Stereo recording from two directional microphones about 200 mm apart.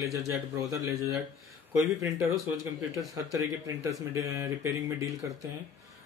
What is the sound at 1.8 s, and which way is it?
Speech, 15° right (ahead or behind).